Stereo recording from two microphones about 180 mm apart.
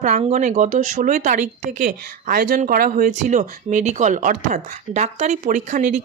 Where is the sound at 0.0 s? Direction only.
40° right (ahead or behind).